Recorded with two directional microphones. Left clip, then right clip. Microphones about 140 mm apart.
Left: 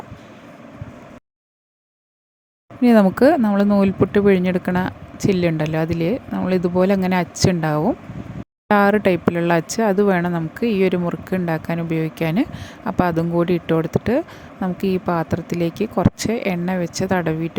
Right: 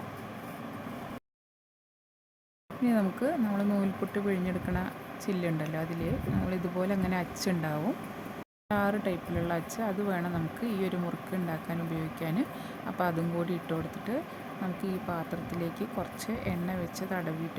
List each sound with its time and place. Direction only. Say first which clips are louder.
2.8 s speech: left 16 dB; 90° left; by 7.8 s 70° left (ahead or behind)
8.6 s speech: left 15 dB; 90° left; by 17.6 s 70° left (ahead or behind)